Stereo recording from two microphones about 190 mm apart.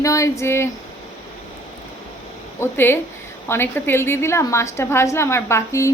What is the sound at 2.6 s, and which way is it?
A woman's voice, 10° left (ahead or behind).